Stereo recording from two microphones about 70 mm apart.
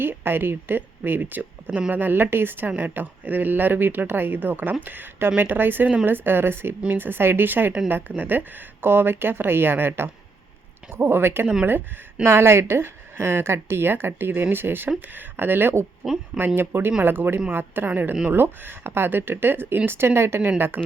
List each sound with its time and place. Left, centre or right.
0.0 s a woman's voice: right